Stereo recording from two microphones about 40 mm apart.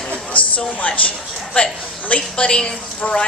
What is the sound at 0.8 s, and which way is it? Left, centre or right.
A woman's voice, left.